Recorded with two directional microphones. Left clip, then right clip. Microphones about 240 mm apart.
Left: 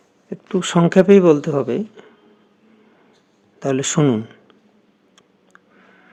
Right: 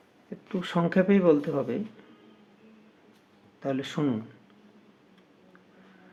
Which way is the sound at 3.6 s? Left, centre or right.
Left.